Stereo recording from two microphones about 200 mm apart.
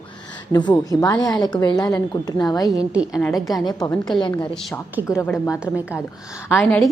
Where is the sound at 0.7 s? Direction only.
10° left (ahead or behind).